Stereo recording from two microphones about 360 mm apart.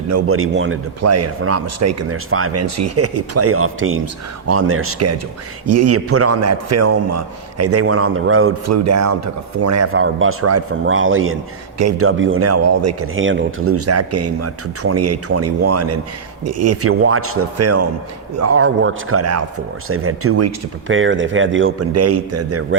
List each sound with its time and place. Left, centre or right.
0.1 s a man's voice: right